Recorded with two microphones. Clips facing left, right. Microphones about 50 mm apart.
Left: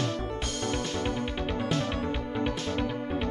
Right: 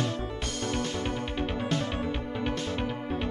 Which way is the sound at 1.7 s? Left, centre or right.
Right.